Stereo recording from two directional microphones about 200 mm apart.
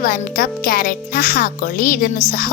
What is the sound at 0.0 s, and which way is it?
A child's voice, 45° left (ahead or behind).